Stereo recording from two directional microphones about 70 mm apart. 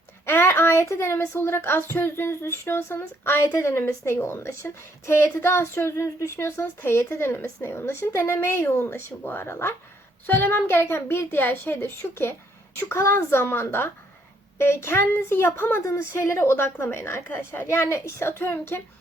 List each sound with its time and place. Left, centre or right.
0.3 s a woman's voice: left